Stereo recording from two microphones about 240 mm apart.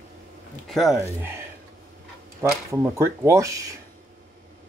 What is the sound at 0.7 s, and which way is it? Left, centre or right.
Speech, centre.